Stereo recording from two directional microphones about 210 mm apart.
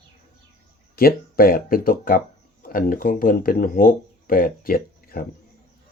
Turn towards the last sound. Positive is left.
turn(degrees=45)  # may be behind; listen again after turning